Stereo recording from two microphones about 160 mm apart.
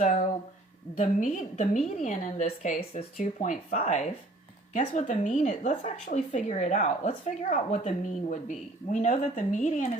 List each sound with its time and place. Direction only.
0.0 s speech: 50° left (ahead or behind)